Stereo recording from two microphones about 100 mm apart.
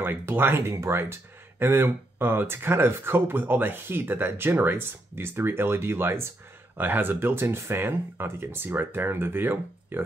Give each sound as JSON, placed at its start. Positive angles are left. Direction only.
{"t": 0.0, "sound": "speech", "side_deg": -25}